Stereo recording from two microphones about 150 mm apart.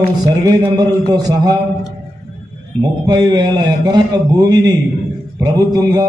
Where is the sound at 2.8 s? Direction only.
30° right (ahead or behind).